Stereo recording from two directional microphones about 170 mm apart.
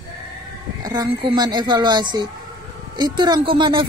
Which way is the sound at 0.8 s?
25° right (ahead or behind).